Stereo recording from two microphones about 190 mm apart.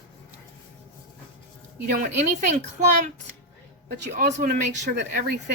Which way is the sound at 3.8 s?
55° right (ahead or behind).